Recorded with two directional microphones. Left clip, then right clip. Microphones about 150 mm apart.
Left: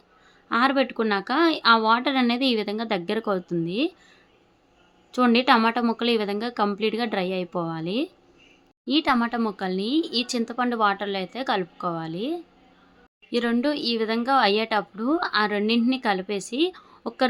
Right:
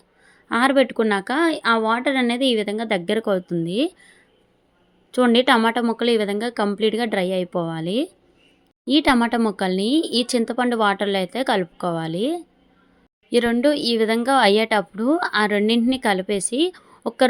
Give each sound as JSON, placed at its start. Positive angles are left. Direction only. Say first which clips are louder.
{"t": 0.4, "sound": "speech", "louder": "right 4 dB", "side_deg": -35}
{"t": 5.1, "sound": "speech", "louder": "right 3 dB", "side_deg": -25}